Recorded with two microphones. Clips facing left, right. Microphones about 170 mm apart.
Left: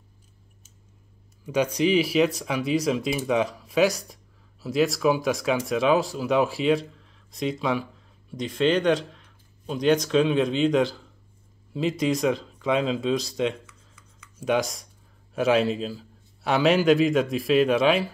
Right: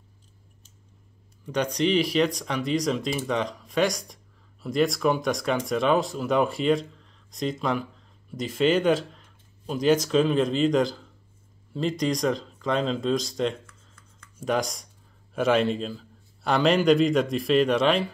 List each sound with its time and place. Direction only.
1.4 s speech: 5° left (ahead or behind)